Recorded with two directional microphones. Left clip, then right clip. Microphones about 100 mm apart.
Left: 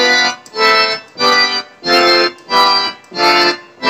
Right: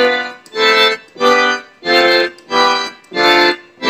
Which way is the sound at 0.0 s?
40° left (ahead or behind).